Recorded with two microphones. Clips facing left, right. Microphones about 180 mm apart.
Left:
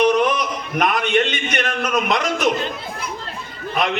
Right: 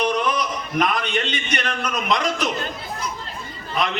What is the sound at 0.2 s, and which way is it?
A man's voice, 50° left (ahead or behind).